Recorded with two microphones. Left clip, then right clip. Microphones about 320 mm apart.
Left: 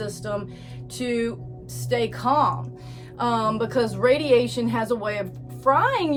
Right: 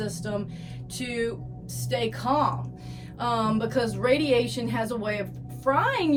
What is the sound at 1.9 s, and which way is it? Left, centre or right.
A woman's voice, centre.